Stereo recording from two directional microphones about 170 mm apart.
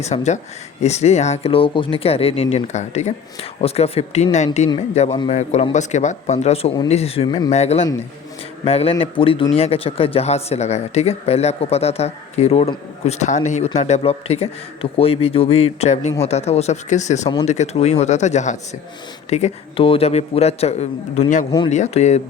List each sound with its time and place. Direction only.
0.0 s speech: 40° left (ahead or behind)
7.5 s speech: 40° left (ahead or behind)